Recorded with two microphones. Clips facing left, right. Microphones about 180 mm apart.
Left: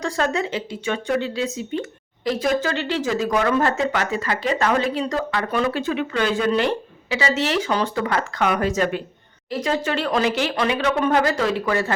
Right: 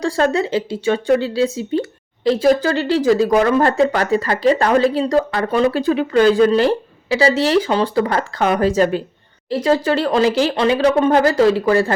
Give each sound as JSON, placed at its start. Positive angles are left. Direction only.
{"t": 0.0, "sound": "speech", "side_deg": -35}